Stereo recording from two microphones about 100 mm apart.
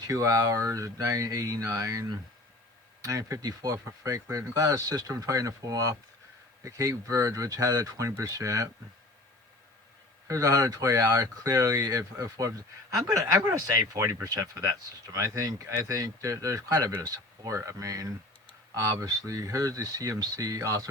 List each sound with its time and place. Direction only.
0.0 s speech: 35° right (ahead or behind)
10.2 s speech: 35° right (ahead or behind)